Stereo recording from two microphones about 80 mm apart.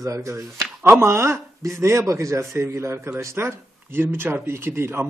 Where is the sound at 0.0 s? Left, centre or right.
Right.